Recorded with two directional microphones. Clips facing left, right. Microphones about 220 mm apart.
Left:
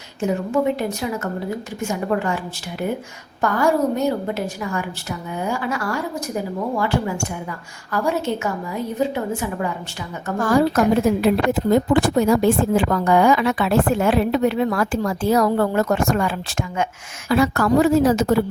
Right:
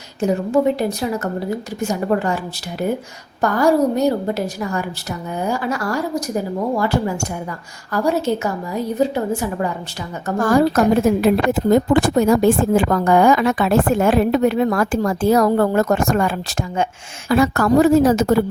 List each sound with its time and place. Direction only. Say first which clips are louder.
0.2 s a woman's voice: right 3 dB; 35° right (ahead or behind)
3.4 s a woman's voice: right 3 dB; 35° right (ahead or behind)
9.0 s a woman's voice: right 3 dB; 35° right (ahead or behind)